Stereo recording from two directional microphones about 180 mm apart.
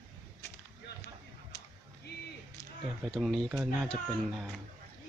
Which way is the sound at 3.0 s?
Centre (ahead or behind).